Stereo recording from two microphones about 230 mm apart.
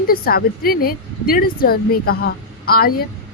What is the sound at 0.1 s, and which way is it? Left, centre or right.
Speech, left.